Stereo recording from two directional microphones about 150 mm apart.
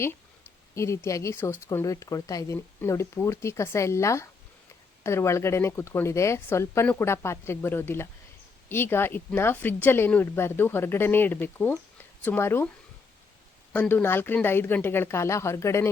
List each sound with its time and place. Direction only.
0.8 s speech: 20° left (ahead or behind)
13.7 s speech: 15° left (ahead or behind)